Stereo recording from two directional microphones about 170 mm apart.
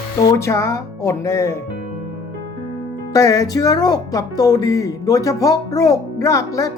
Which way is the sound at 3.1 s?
20° left (ahead or behind).